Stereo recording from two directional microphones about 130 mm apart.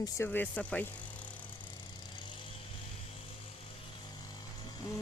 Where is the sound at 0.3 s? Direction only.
10° left (ahead or behind).